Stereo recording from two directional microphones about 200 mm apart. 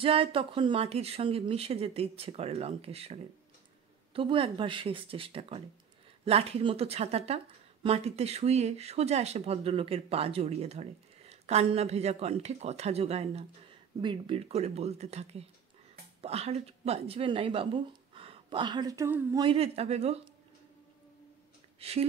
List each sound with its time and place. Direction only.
0.0 s a woman's voice: 30° right (ahead or behind); by 19.4 s 15° right (ahead or behind)
19.4 s speech: 30° right (ahead or behind)
21.7 s speech: 30° right (ahead or behind)